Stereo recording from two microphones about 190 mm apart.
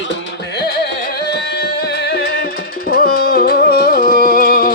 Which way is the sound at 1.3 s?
60° left (ahead or behind).